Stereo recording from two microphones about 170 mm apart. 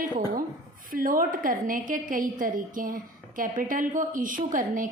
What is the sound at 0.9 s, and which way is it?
A woman's voice, 55° right (ahead or behind).